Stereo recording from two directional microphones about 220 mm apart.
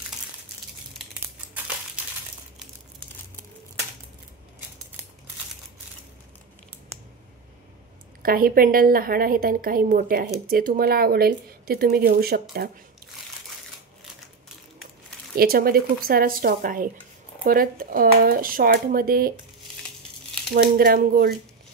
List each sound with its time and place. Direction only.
8.2 s a woman's voice: 40° right (ahead or behind)
15.3 s a woman's voice: 45° right (ahead or behind)
20.5 s speech: 45° right (ahead or behind)